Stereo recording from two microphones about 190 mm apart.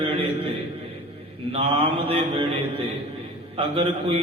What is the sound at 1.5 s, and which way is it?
A man's voice, 30° right (ahead or behind).